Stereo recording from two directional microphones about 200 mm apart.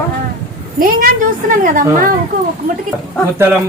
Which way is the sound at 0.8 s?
45° right (ahead or behind).